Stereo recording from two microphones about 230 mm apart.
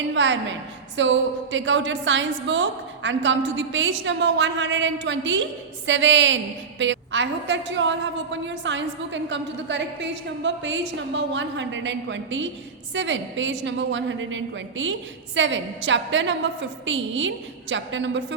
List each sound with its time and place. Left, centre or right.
0.1 s a woman's voice: right